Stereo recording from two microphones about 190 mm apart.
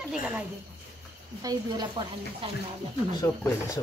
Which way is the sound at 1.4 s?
20° right (ahead or behind).